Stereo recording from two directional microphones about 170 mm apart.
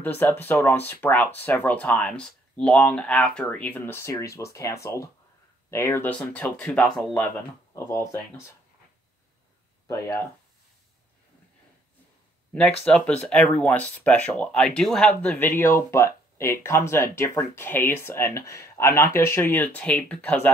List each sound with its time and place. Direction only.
0.0 s speech: 10° left (ahead or behind)
7.7 s speech: 15° left (ahead or behind)
12.8 s speech: 5° left (ahead or behind)